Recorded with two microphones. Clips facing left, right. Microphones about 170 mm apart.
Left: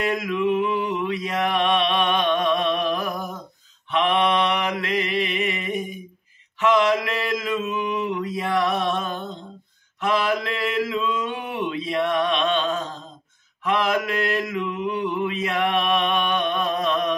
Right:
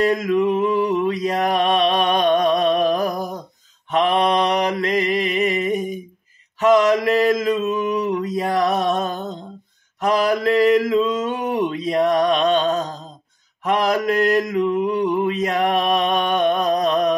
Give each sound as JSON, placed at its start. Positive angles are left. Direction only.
{"t": 0.0, "sound": "mantra", "side_deg": -40}